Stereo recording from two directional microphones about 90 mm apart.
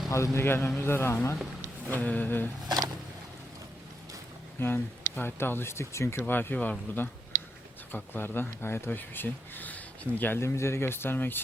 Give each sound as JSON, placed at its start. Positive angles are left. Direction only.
{"t": 0.3, "sound": "speech", "side_deg": 25}
{"t": 1.9, "sound": "speech", "side_deg": 20}
{"t": 2.6, "sound": "a sound", "side_deg": -45}
{"t": 4.6, "sound": "speech", "side_deg": 25}